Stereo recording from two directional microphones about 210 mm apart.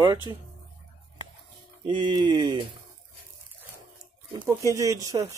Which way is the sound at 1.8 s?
25° right (ahead or behind).